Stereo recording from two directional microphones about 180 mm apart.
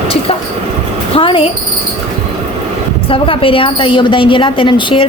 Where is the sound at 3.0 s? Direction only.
30° left (ahead or behind).